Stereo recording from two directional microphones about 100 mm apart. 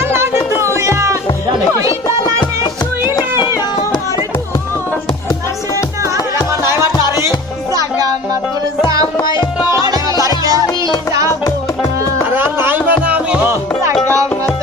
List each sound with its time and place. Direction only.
0.0 s music: 25° right (ahead or behind)
3.5 s music: 45° left (ahead or behind)
9.3 s tabla: 50° left (ahead or behind)
9.7 s music: 40° right (ahead or behind)
12.3 s music: 20° right (ahead or behind)